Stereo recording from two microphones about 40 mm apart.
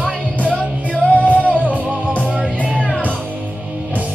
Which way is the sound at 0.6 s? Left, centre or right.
Left.